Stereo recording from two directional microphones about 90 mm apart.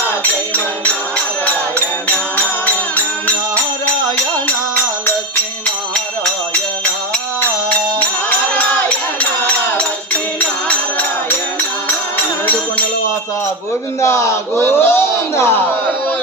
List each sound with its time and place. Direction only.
2.6 s music: 20° left (ahead or behind)
8.3 s music: 20° left (ahead or behind)
14.0 s a sound: 30° left (ahead or behind)